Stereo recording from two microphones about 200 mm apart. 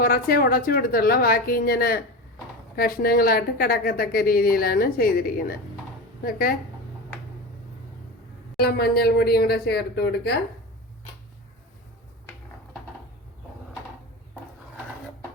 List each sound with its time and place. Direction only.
0.0 s a woman's voice: 50° left (ahead or behind)
8.5 s a woman's voice: 50° left (ahead or behind)